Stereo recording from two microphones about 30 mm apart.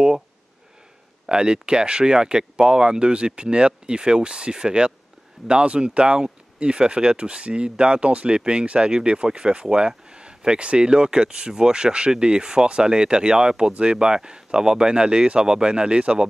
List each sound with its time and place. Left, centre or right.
1.3 s speech: right